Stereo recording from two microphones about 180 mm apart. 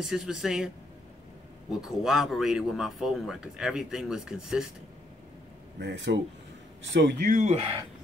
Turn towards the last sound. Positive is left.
turn(degrees=-35)  # may be behind; listen again after turning